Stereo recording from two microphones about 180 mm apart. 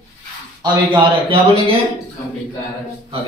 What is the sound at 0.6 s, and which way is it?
Speech, 25° right (ahead or behind).